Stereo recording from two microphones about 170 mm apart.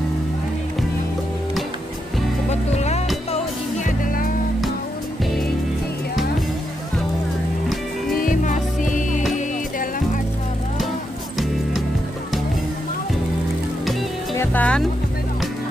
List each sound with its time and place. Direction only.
2.5 s music: 40° left (ahead or behind)
3.8 s music: 50° left (ahead or behind)
8.2 s music: 50° left (ahead or behind)
14.3 s music: 10° left (ahead or behind)